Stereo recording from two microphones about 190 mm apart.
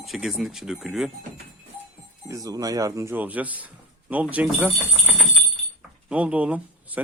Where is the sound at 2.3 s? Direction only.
20° right (ahead or behind).